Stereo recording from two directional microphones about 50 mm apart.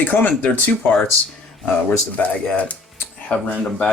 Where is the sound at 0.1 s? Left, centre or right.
Left.